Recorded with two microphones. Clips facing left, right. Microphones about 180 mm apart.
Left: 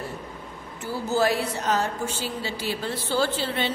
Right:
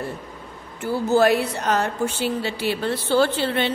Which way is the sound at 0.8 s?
60° right (ahead or behind).